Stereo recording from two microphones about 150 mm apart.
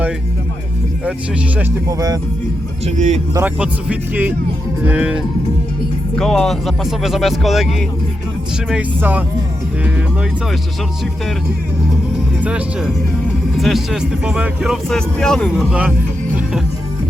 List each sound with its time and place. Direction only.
1.9 s speech: 25° right (ahead or behind)
2.8 s speech: 50° right (ahead or behind)
3.3 s speech: 10° right (ahead or behind)
6.1 s speech: 5° left (ahead or behind)
12.4 s speech: 5° right (ahead or behind)